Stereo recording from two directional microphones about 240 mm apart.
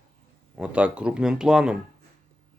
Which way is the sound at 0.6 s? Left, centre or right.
Centre.